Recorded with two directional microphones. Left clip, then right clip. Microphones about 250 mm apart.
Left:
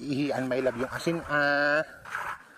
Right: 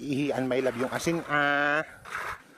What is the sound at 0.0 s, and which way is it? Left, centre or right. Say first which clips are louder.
Speech: right 1 dB; centre.